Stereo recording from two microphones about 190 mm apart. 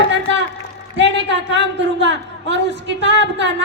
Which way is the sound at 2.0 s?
70° right (ahead or behind).